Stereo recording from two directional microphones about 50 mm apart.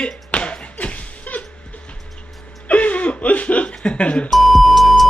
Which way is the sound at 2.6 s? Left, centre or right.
Left.